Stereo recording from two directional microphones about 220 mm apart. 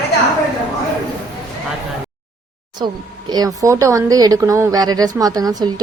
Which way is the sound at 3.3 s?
15° right (ahead or behind).